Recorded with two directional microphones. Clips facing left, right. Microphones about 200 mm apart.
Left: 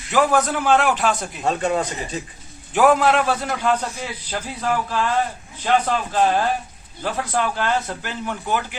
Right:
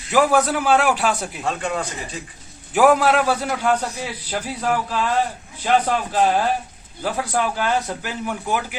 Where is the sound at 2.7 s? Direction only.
10° right (ahead or behind).